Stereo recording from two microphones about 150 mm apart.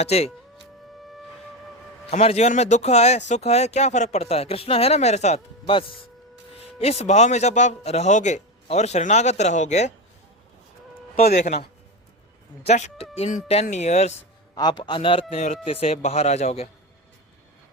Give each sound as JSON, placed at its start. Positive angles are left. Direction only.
{"t": 0.0, "sound": "speech", "side_deg": 45}
{"t": 2.0, "sound": "speech", "side_deg": 45}
{"t": 11.2, "sound": "speech", "side_deg": 50}
{"t": 12.6, "sound": "speech", "side_deg": 45}
{"t": 14.5, "sound": "a man's voice", "side_deg": 30}